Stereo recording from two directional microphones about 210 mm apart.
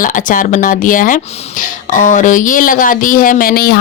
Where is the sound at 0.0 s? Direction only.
40° left (ahead or behind).